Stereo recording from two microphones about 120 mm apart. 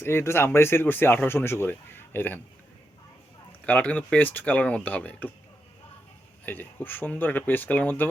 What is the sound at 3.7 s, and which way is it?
Speech, 10° left (ahead or behind).